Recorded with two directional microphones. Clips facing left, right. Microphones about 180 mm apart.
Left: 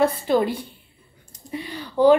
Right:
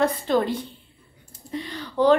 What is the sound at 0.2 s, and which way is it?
A woman's voice, 10° left (ahead or behind).